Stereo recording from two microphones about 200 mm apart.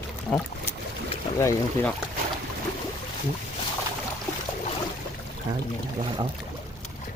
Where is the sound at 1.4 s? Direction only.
15° left (ahead or behind).